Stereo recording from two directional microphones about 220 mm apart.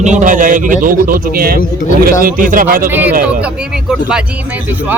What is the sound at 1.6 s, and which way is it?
Speech, 35° left (ahead or behind).